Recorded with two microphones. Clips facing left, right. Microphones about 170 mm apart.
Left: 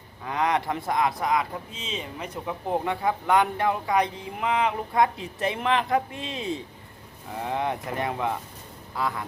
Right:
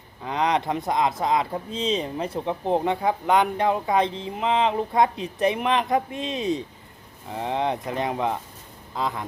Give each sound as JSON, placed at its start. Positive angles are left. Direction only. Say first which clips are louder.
{"t": 0.3, "sound": "speech", "louder": "right 2 dB", "side_deg": -20}